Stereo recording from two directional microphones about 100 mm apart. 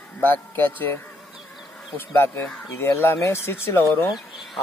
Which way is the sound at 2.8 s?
25° left (ahead or behind).